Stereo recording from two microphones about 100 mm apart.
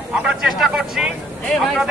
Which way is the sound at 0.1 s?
5° right (ahead or behind).